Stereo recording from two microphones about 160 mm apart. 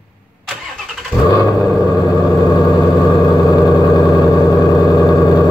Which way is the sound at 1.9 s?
25° left (ahead or behind).